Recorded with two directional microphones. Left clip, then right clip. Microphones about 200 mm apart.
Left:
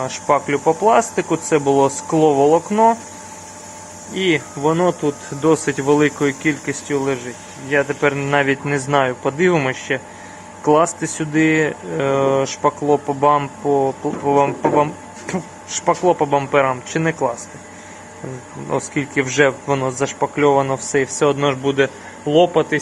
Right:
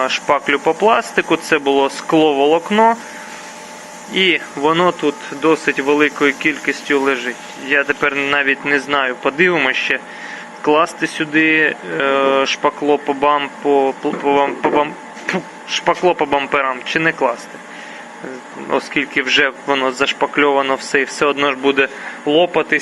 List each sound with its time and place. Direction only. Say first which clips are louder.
0.0 s speech: right 2 dB; 10° left (ahead or behind)
4.1 s speech: right 4 dB; 10° left (ahead or behind)
15.9 s speech: right 1 dB; 10° left (ahead or behind)
18.7 s speech: right 4 dB; 10° left (ahead or behind)
22.3 s speech: even; 15° right (ahead or behind)